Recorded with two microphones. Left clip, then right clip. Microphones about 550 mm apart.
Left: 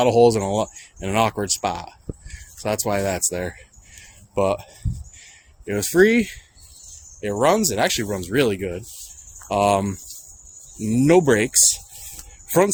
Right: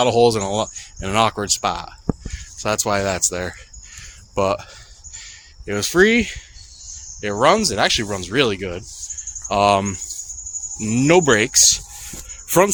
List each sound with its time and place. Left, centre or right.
0.0 s speech: left